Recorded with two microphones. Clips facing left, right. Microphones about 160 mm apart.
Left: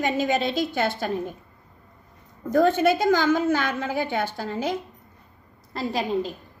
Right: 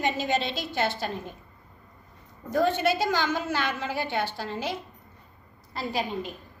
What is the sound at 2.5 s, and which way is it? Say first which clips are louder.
A child's voice: left 5 dB; 50° left (ahead or behind).